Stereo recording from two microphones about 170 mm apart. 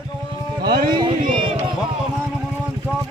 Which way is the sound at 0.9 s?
30° right (ahead or behind).